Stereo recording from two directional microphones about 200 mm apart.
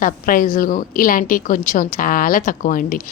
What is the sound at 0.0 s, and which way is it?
A woman's voice, 45° left (ahead or behind).